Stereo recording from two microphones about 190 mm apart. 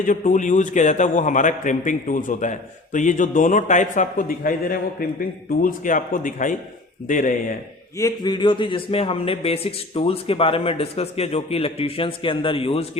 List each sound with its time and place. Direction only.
0.0 s a man's voice: 40° left (ahead or behind)
7.9 s a man's voice: 20° left (ahead or behind)